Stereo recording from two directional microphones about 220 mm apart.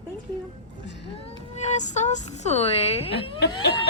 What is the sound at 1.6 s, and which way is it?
Speech, 30° left (ahead or behind).